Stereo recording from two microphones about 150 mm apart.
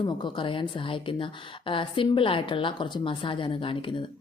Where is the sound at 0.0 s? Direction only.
35° left (ahead or behind).